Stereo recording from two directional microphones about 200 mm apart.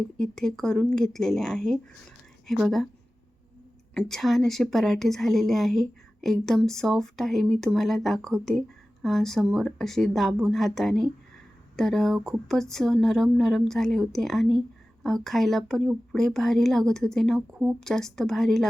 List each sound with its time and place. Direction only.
0.2 s a woman's voice: 5° left (ahead or behind)
3.9 s a woman's voice: centre (ahead or behind)